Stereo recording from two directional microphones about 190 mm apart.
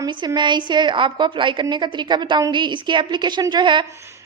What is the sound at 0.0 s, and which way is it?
A woman's voice, 20° right (ahead or behind).